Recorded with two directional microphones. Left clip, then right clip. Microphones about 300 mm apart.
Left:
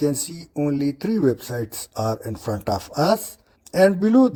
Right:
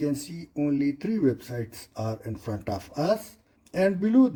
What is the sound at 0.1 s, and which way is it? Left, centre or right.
Speech, left.